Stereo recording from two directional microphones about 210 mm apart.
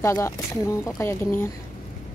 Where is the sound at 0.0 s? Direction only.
15° left (ahead or behind).